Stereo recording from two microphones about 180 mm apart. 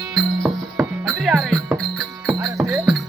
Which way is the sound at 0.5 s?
Centre (ahead or behind).